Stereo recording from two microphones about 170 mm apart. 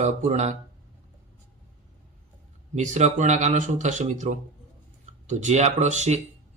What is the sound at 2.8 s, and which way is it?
Speech, 45° right (ahead or behind).